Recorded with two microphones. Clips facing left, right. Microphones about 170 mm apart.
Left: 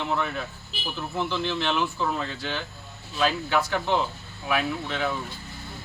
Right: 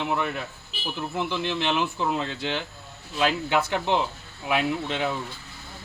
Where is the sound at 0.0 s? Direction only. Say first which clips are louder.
Right 1 dB; 10° right (ahead or behind).